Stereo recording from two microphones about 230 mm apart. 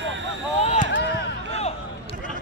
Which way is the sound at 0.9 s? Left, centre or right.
Left.